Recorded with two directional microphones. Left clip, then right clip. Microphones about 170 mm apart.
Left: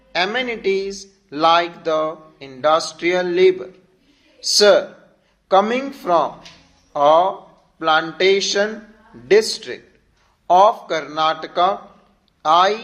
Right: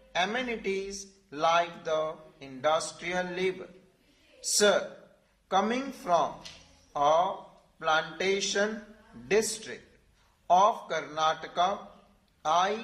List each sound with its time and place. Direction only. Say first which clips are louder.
0.1 s a man's voice: left 9 dB; 30° left (ahead or behind)